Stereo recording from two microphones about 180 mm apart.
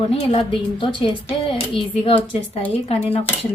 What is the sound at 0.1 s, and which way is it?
A woman's voice, 35° left (ahead or behind).